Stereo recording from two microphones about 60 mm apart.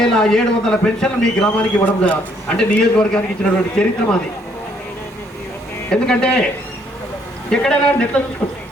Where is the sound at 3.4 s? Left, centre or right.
Left.